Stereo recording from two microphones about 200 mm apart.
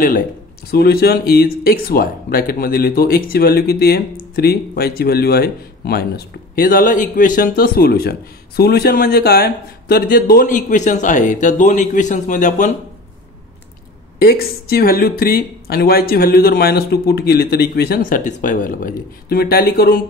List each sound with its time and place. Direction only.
0.7 s speech: 50° left (ahead or behind)
14.2 s speech: 50° left (ahead or behind)